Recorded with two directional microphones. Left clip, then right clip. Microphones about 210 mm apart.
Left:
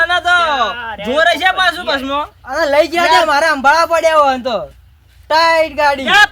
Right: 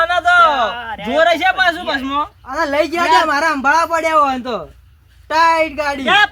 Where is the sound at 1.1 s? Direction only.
20° left (ahead or behind).